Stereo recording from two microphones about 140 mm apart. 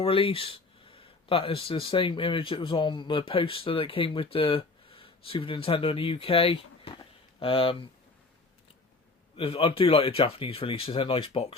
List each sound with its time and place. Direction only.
0.0 s speech: 40° left (ahead or behind)
9.3 s speech: 40° left (ahead or behind)